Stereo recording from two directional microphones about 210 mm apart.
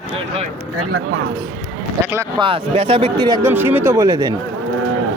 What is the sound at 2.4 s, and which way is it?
Speech, 25° right (ahead or behind).